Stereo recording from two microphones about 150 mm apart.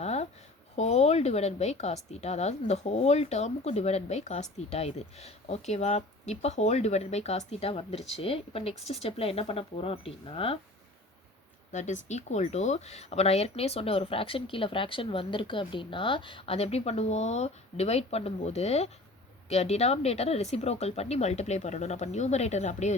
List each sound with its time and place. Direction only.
0.0 s a sound: 45° left (ahead or behind)
0.8 s a woman's voice: 50° left (ahead or behind)
11.7 s a woman's voice: 55° left (ahead or behind)